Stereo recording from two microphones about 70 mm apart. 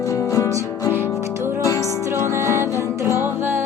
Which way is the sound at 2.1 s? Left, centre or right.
Right.